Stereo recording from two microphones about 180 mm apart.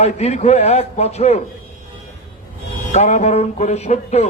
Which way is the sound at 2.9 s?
35° left (ahead or behind).